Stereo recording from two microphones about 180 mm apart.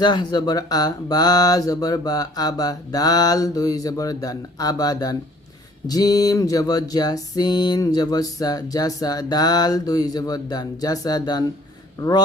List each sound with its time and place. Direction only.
0.0 s music: 25° left (ahead or behind)